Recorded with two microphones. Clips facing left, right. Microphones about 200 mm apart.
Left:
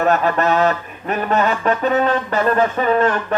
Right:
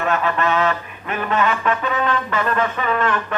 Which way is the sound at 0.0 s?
40° left (ahead or behind).